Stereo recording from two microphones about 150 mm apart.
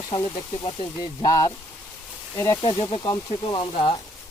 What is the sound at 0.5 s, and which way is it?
Speech, 35° left (ahead or behind).